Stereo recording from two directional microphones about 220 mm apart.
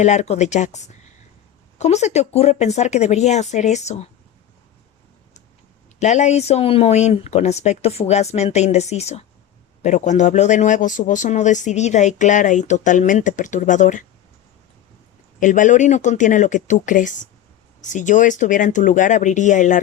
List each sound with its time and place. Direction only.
0.0 s a man's voice: 30° left (ahead or behind)
6.0 s a man's voice: 30° left (ahead or behind)
15.4 s a man's voice: 35° left (ahead or behind)